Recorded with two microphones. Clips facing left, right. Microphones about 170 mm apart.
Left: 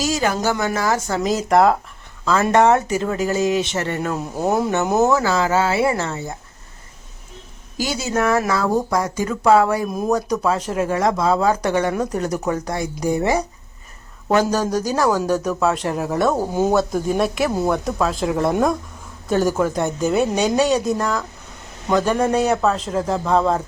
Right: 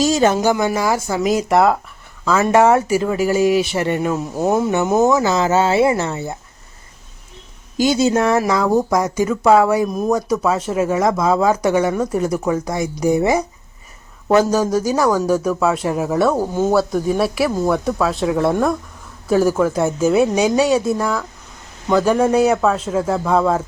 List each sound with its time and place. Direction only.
0.0 s speech: 25° right (ahead or behind)
0.3 s speech: 10° right (ahead or behind)
4.1 s a woman's voice: centre (ahead or behind)
5.0 s speech: 20° right (ahead or behind)
7.8 s speech: 25° right (ahead or behind)
8.4 s a woman's voice: 10° right (ahead or behind)